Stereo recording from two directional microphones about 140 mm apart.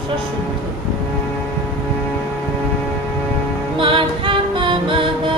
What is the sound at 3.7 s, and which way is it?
Music, 35° right (ahead or behind).